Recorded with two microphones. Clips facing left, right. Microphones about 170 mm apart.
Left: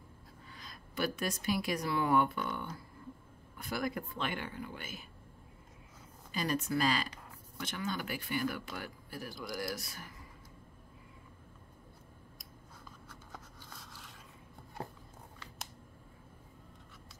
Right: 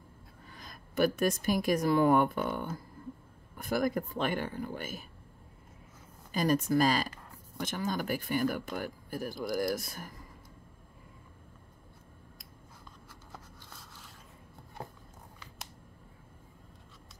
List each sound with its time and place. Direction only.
0.5 s a woman's voice: 50° right (ahead or behind)
6.3 s speech: 45° right (ahead or behind)
13.1 s a sound: 5° right (ahead or behind)